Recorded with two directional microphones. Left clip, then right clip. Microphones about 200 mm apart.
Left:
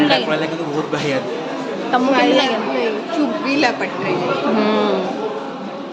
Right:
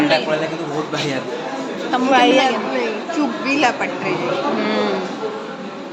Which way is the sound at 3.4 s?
10° right (ahead or behind).